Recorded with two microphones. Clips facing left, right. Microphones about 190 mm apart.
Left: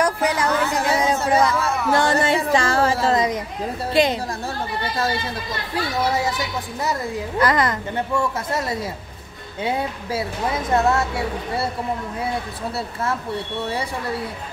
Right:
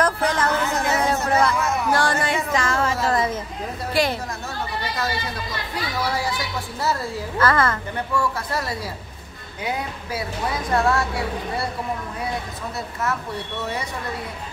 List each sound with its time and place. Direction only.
0.0 s a sound: 10° left (ahead or behind)
1.9 s speech: 20° left (ahead or behind)
2.2 s music: 30° left (ahead or behind)
3.2 s a sound: 15° left (ahead or behind)
3.9 s speech: 20° left (ahead or behind)
12.7 s speech: 30° left (ahead or behind)